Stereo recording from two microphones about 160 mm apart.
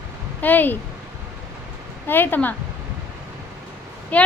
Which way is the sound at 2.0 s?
10° left (ahead or behind).